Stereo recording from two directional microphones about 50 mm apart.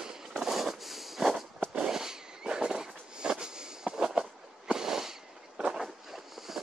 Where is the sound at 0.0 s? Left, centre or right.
Centre.